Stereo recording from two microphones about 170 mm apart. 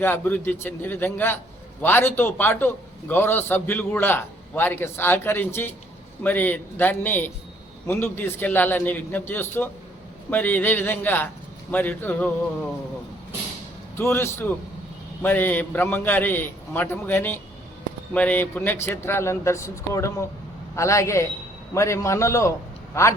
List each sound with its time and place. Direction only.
0.0 s a man's voice: 10° left (ahead or behind)
13.9 s a man's voice: 15° left (ahead or behind)